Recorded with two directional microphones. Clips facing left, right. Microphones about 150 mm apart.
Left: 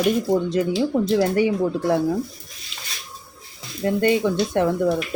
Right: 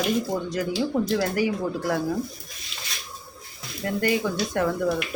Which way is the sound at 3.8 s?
25° left (ahead or behind).